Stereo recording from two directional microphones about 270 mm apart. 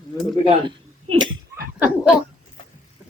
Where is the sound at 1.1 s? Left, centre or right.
Right.